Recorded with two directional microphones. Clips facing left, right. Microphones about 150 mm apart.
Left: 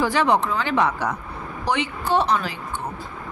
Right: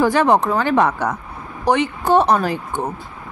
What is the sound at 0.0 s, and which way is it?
A woman's voice, 50° right (ahead or behind).